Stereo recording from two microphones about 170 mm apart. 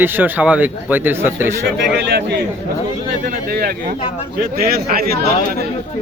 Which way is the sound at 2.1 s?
80° right.